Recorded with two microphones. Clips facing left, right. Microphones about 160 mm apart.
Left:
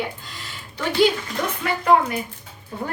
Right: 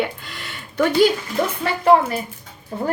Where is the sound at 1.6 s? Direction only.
30° right (ahead or behind).